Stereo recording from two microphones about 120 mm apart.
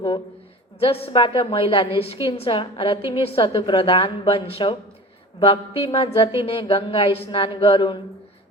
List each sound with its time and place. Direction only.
0.8 s a woman's voice: 55° left (ahead or behind)